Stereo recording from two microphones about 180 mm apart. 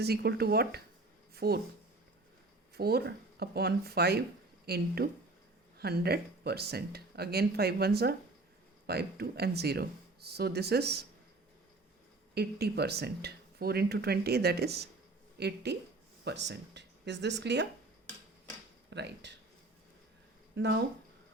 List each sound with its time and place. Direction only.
0.0 s speech: 60° right (ahead or behind)
2.7 s speech: 60° right (ahead or behind)
12.3 s speech: 60° right (ahead or behind)
18.9 s speech: 75° right (ahead or behind)
20.6 s speech: 70° right (ahead or behind)